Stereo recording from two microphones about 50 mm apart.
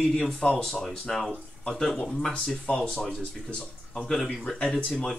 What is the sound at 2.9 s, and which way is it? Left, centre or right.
Speech, centre.